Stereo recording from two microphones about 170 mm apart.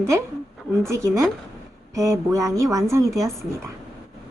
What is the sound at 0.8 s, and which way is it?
A woman's voice, 15° right (ahead or behind).